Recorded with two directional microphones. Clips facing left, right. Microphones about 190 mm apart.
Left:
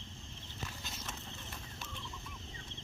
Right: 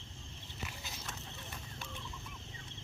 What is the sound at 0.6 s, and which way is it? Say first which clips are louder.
Clip-clop: left 1 dB; 5° right (ahead or behind).